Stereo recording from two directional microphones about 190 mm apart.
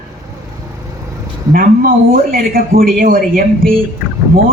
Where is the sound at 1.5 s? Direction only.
50° right (ahead or behind).